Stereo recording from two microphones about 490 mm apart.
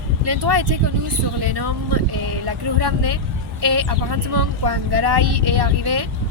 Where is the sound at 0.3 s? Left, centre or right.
Right.